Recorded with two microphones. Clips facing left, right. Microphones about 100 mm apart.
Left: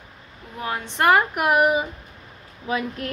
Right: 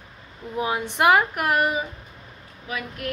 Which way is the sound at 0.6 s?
15° right (ahead or behind).